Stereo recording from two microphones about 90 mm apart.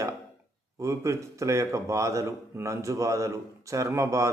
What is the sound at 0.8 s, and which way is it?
A man's voice, 35° right (ahead or behind).